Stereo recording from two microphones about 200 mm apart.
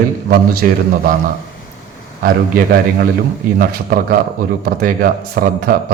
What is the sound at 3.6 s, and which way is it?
Speech, 45° right (ahead or behind).